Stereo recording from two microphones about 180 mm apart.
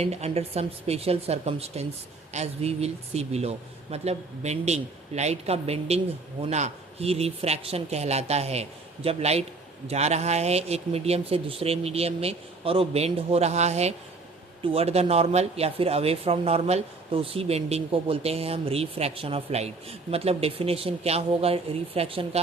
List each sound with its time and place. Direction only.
0.0 s speech: 35° right (ahead or behind)